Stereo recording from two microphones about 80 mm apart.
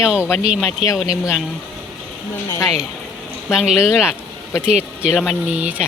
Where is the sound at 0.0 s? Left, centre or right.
Centre.